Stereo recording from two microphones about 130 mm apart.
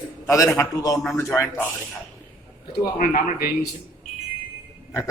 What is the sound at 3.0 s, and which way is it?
Speech, 85° left.